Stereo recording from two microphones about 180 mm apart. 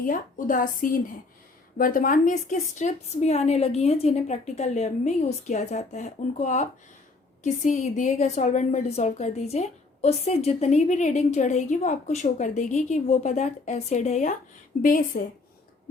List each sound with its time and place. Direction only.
0.0 s a woman's voice: 50° left (ahead or behind)